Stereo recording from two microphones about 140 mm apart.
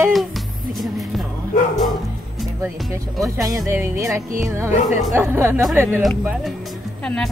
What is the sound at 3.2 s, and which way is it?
Speech, 25° right (ahead or behind).